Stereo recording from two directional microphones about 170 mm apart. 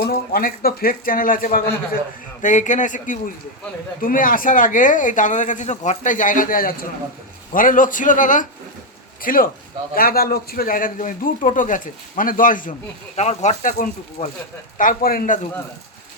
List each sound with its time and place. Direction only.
0.0 s a man's voice: 60° left (ahead or behind)
13.1 s a man's voice: 40° left (ahead or behind); by 15.4 s 60° left (ahead or behind)